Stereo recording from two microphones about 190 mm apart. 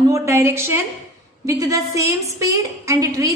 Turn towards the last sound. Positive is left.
turn(degrees=-15)  # may be behind; listen again after turning